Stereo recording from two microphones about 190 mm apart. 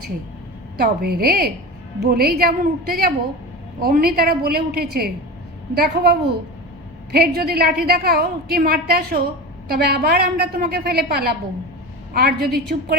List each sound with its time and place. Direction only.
0.8 s a woman's voice: 55° right (ahead or behind)